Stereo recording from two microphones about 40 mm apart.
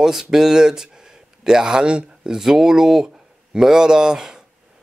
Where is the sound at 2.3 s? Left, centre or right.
Centre.